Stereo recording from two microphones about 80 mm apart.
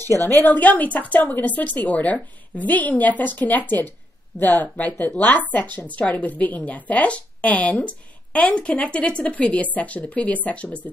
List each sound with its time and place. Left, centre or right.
0.4 s a woman's voice: left
4.3 s speech: left
4.7 s a woman's voice: centre